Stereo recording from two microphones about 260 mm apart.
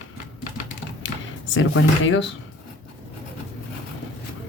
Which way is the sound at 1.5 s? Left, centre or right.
Left.